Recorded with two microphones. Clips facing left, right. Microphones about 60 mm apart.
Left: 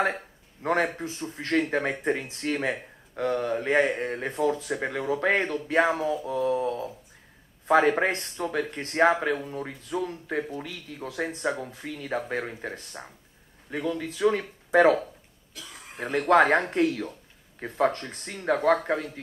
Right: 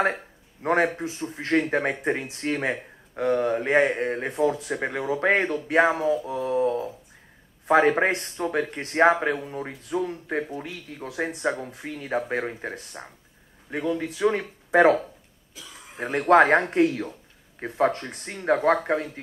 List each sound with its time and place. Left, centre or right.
0.0 s a sound: centre
0.8 s a man's voice: centre
16.0 s speech: centre